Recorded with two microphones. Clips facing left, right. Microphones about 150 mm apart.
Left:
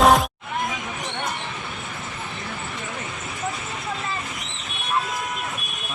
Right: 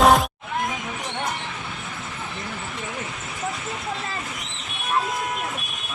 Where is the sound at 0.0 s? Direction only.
Centre (ahead or behind).